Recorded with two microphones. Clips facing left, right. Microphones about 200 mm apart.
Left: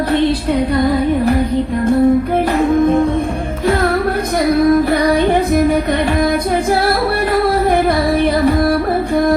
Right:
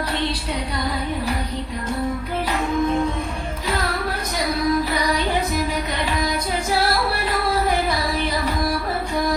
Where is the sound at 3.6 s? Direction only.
55° left (ahead or behind).